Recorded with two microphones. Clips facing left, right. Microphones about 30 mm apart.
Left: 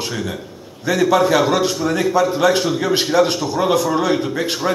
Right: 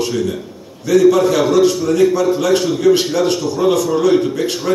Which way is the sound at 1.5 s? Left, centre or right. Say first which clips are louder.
Right 5 dB; left.